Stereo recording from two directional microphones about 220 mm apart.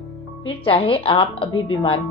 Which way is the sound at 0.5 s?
25° left (ahead or behind).